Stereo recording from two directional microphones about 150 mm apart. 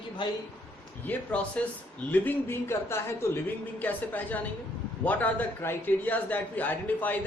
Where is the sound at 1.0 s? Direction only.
10° left (ahead or behind).